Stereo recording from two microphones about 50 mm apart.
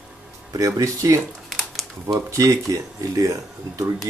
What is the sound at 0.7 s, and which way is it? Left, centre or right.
Speech, right.